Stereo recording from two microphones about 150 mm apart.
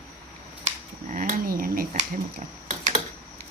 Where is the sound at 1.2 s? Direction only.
70° right (ahead or behind).